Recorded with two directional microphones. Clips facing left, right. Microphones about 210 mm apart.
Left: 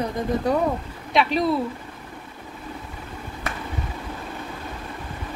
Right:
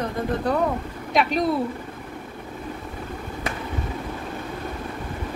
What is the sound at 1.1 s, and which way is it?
Speech, centre (ahead or behind).